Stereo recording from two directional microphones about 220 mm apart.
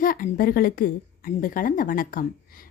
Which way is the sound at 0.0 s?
40° left (ahead or behind).